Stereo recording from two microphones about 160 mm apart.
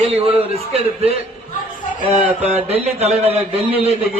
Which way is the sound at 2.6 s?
40° right (ahead or behind).